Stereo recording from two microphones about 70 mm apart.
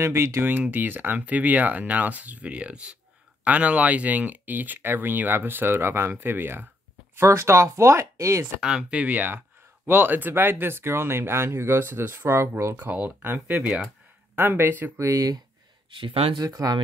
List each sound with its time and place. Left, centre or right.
0.0 s speech: right
0.5 s speech: right
7.2 s speech: right
8.5 s speech: centre
8.9 s speech: right
15.0 s speech: right